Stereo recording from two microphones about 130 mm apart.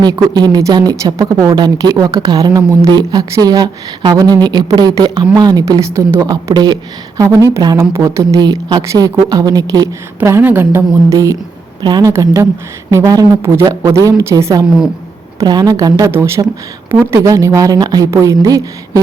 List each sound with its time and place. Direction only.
0.0 s a woman's voice: 30° right (ahead or behind)
10.2 s a woman's voice: 15° right (ahead or behind); by 12.1 s 35° right (ahead or behind)
12.1 s a woman's voice: 25° right (ahead or behind)